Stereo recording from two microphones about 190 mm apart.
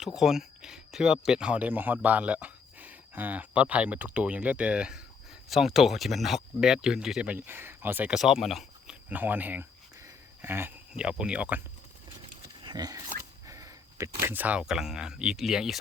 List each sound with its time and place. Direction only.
0.0 s speech: centre (ahead or behind)
12.6 s speech: 20° right (ahead or behind)
13.5 s a sound: 15° right (ahead or behind)
14.2 s speech: 10° right (ahead or behind)